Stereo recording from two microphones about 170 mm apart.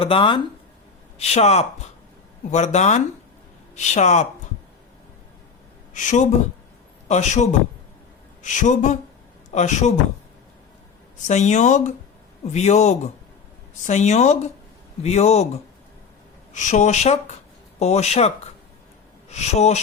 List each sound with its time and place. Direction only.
0.0 s speech: 30° left (ahead or behind)
5.9 s speech: 45° left (ahead or behind)
11.3 s speech: 45° left (ahead or behind)
16.6 s speech: 45° left (ahead or behind)